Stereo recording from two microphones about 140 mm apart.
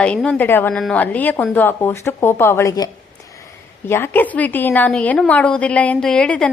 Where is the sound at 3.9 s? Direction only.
15° left (ahead or behind).